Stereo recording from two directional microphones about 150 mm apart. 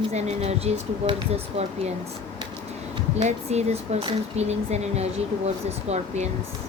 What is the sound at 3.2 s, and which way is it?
Speech, 50° right (ahead or behind).